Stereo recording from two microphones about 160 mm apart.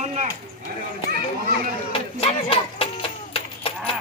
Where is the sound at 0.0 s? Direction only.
45° right (ahead or behind).